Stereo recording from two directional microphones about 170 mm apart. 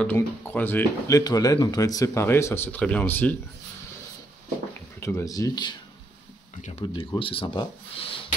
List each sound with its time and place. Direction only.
0.0 s speech: 10° left (ahead or behind)
5.0 s speech: 15° left (ahead or behind)
6.8 s speech: 30° left (ahead or behind)